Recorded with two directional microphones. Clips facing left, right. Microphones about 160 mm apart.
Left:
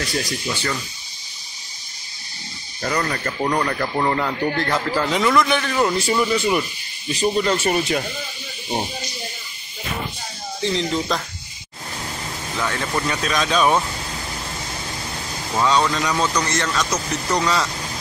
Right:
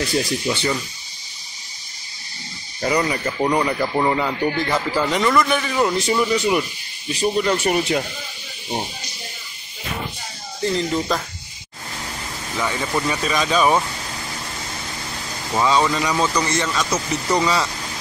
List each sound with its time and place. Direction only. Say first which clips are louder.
0.2 s speech: right 4 dB; 20° right (ahead or behind)
2.8 s speech: right 3 dB; 10° right (ahead or behind)
6.3 s speech: right 1 dB; 20° right (ahead or behind)
10.6 s speech: right 1 dB; 5° right (ahead or behind)
12.5 s speech: right 1 dB; 10° right (ahead or behind)
15.5 s speech: right 1 dB; 10° right (ahead or behind)